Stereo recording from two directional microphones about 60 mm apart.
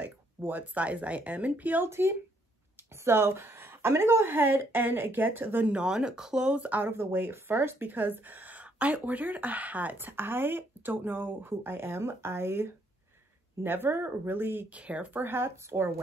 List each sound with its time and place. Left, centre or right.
0.0 s speech: right
1.9 s speech: right
5.7 s speech: centre
6.6 s speech: right
6.9 s speech: right
14.7 s speech: right